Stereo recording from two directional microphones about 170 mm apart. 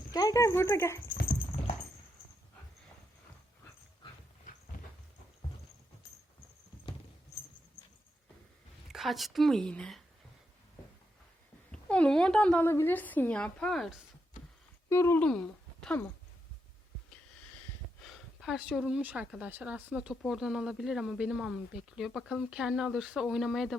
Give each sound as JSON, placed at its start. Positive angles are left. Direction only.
{"t": 0.1, "sound": "a woman's voice", "side_deg": 20}
{"t": 8.9, "sound": "speech", "side_deg": 0}
{"t": 11.7, "sound": "a woman's voice", "side_deg": 5}
{"t": 14.8, "sound": "speech", "side_deg": 15}
{"t": 18.0, "sound": "speech", "side_deg": 0}